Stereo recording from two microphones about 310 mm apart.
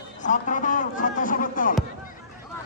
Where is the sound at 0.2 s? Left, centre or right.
Left.